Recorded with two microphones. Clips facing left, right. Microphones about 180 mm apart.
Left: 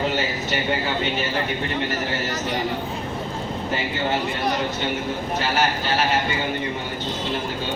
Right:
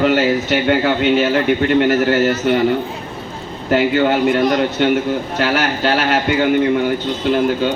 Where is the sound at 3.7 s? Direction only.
70° right (ahead or behind).